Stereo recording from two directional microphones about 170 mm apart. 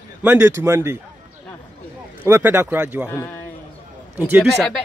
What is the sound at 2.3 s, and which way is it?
Speech, 15° right (ahead or behind).